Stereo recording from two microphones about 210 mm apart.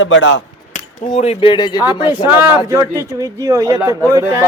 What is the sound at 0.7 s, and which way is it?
Speech, 30° left (ahead or behind).